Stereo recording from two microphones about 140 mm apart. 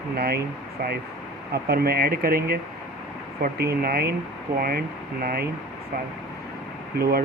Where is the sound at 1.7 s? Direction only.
90° right.